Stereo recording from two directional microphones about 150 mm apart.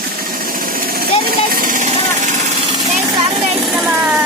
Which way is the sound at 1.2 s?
85° right.